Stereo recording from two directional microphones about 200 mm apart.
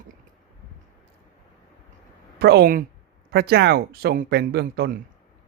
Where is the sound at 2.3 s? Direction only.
55° right (ahead or behind).